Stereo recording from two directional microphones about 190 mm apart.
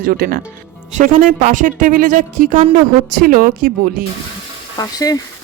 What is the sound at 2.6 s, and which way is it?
Speech, 30° right (ahead or behind).